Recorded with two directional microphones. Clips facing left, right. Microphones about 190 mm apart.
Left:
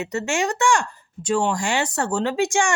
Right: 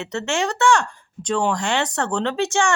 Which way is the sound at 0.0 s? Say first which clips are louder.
Even; 10° left (ahead or behind).